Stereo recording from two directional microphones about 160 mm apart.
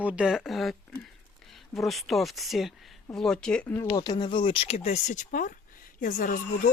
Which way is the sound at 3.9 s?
25° left (ahead or behind).